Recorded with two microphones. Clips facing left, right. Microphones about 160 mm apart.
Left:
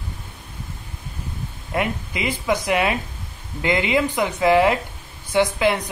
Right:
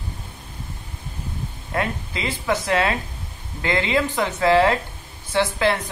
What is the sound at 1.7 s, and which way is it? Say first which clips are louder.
A woman's voice: left 2 dB; 15° left (ahead or behind).